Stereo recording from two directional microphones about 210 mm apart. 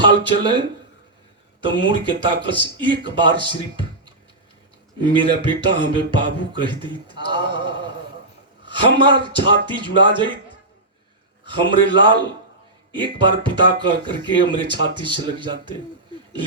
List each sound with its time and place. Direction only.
0.0 s speech: 20° right (ahead or behind)
1.6 s speech: 20° right (ahead or behind)
8.6 s a sound: 20° right (ahead or behind)
9.0 s speech: 20° right (ahead or behind)
11.4 s speech: 20° right (ahead or behind)